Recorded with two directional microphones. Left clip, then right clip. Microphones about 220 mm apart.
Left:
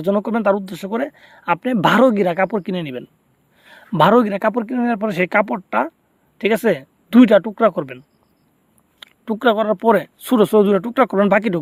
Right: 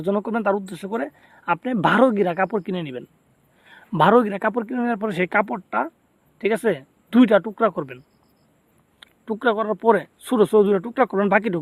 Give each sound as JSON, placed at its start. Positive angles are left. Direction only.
{"t": 0.0, "sound": "speech", "side_deg": 25}